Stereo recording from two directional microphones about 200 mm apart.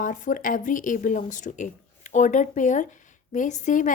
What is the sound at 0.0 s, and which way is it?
A woman's voice, 40° left (ahead or behind).